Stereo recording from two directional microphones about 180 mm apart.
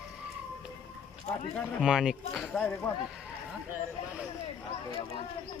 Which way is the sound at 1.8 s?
5° right (ahead or behind).